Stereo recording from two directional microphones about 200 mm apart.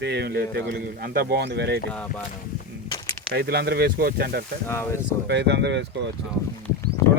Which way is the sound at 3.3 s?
50° right (ahead or behind).